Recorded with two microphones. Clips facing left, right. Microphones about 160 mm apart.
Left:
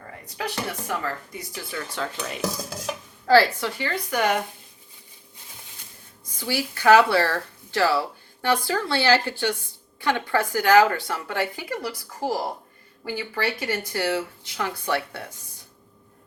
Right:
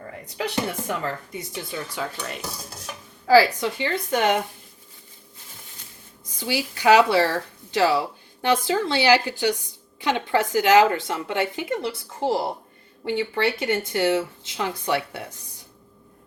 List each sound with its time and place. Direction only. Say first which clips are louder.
0.3 s speech: right 3 dB; 25° right (ahead or behind)
2.0 s speech: left 1 dB; 10° right (ahead or behind)
3.2 s speech: right 2 dB; 10° right (ahead or behind)
3.8 s speech: right 2 dB; 25° right (ahead or behind)
6.4 s speech: even; 15° right (ahead or behind)